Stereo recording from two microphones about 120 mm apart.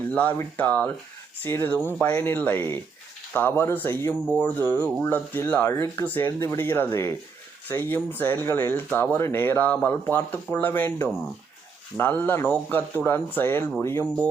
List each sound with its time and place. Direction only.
0.1 s speech: 15° left (ahead or behind)